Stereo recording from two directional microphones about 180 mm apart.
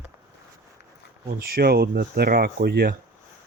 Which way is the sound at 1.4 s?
60° right (ahead or behind).